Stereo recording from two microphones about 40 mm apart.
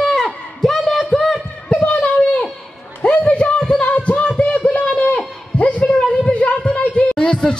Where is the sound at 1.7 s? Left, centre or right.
Left.